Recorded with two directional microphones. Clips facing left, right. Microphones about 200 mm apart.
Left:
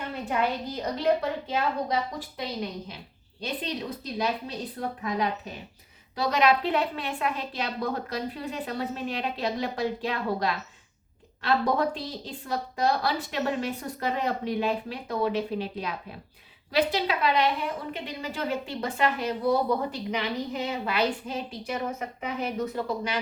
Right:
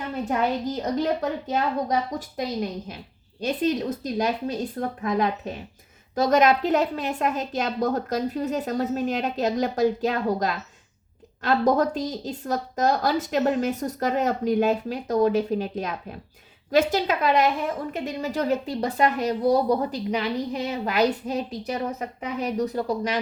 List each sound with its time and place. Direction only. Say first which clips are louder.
0.8 s a woman's voice: left 2 dB; 45° right (ahead or behind)